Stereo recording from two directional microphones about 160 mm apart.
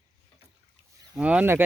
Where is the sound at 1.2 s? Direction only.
5° right (ahead or behind).